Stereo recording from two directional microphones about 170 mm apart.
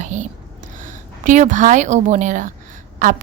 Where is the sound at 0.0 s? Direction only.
45° right (ahead or behind).